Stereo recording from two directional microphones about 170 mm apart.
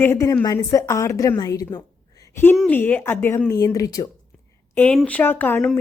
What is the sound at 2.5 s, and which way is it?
A woman's voice, 10° left (ahead or behind).